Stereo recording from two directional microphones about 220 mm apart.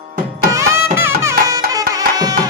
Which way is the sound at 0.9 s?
10° right (ahead or behind).